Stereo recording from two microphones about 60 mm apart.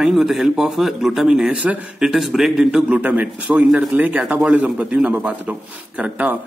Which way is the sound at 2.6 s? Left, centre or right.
Centre.